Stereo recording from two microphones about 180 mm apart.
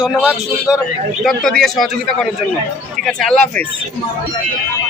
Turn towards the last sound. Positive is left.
turn(degrees=5)  # may be behind; listen again after turning